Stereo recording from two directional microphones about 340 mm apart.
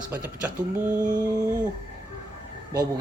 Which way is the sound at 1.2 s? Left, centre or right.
Centre.